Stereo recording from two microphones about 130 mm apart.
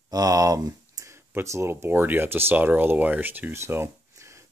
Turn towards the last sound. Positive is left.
turn(degrees=-20)  # may be behind; listen again after turning